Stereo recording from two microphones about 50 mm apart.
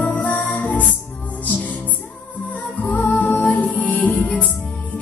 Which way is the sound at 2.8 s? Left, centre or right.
Left.